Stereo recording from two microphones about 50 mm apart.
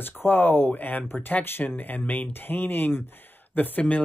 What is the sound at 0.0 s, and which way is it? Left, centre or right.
Speech, left.